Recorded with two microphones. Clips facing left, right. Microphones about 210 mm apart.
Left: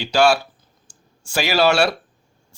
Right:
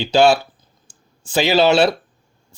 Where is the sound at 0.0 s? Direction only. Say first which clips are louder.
Right 3 dB; 25° right (ahead or behind).